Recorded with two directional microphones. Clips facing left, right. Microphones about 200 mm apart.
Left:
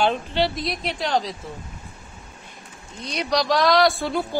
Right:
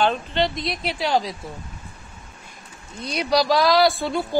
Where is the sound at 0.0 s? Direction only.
10° left (ahead or behind); by 1.3 s 10° right (ahead or behind).